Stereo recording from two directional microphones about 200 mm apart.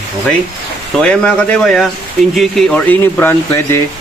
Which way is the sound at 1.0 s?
5° left (ahead or behind).